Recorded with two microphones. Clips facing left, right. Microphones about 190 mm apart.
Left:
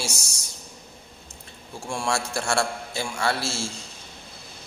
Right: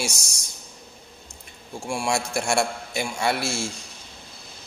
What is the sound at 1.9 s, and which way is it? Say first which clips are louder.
A man's voice: right 2 dB; 15° right (ahead or behind).